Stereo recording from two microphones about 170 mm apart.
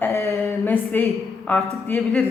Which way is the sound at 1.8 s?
10° left (ahead or behind).